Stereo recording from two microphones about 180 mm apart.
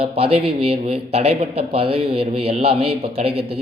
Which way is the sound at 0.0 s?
35° right (ahead or behind).